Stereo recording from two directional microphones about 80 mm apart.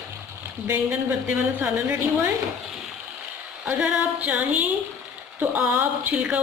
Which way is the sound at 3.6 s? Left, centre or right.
Centre.